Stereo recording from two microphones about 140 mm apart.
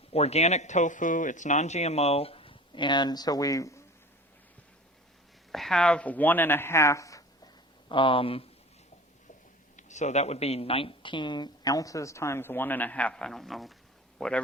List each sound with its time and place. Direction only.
0.1 s speech: 50° left (ahead or behind); by 3.8 s 20° left (ahead or behind)
5.5 s speech: centre (ahead or behind); by 7.3 s 25° left (ahead or behind)
7.9 s speech: 35° left (ahead or behind)
9.7 s a woman's voice: 55° left (ahead or behind); by 14.4 s 5° left (ahead or behind)